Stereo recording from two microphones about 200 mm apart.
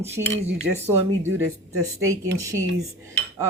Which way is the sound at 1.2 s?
90° right.